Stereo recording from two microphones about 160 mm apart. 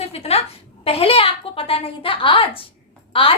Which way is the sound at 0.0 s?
40° left (ahead or behind).